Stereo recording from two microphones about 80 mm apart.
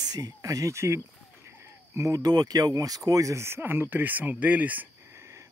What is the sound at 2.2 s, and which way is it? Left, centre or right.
Speech, right.